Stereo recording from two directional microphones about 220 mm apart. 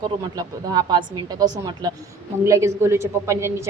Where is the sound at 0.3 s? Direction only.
20° right (ahead or behind).